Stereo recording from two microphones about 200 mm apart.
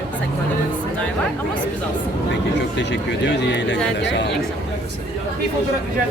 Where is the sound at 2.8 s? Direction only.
60° left (ahead or behind).